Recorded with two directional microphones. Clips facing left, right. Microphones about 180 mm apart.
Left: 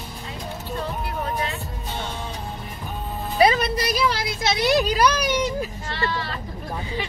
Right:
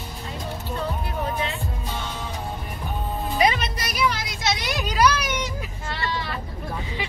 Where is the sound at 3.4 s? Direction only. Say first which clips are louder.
Left 5 dB; 30° left (ahead or behind).